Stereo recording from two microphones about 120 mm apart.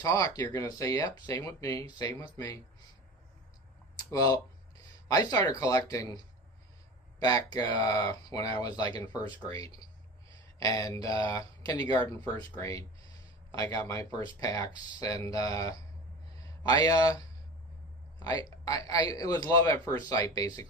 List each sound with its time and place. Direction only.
0.0 s speech: 30° left (ahead or behind)
3.9 s speech: 30° left (ahead or behind)
7.2 s speech: 30° left (ahead or behind)